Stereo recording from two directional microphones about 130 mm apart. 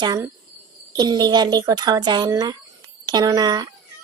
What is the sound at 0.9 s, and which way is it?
Speech, 30° right (ahead or behind).